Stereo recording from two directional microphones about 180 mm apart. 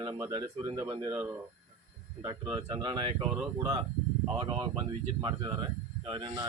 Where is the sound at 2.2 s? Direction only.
25° right (ahead or behind).